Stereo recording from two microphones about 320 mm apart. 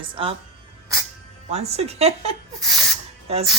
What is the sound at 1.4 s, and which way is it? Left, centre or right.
Speech, centre.